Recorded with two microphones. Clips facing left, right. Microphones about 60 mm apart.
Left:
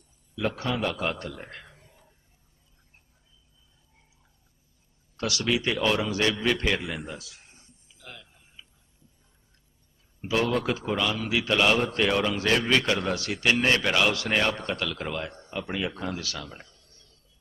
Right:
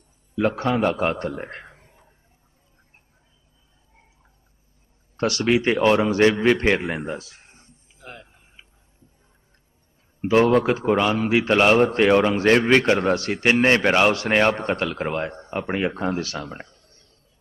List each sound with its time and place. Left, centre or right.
0.3 s a man's voice: right
5.1 s a man's voice: right
10.2 s a man's voice: right